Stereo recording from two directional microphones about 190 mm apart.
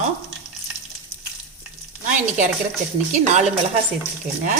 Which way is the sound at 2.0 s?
40° right (ahead or behind).